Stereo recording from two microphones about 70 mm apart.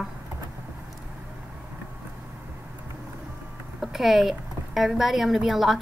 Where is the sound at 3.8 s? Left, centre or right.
Centre.